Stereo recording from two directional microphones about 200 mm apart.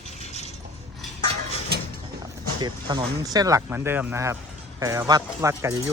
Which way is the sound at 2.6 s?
20° right (ahead or behind).